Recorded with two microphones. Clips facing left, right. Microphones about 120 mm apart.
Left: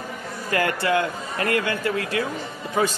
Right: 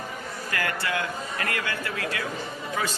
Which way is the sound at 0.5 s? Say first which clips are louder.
Left 8 dB; 30° left (ahead or behind).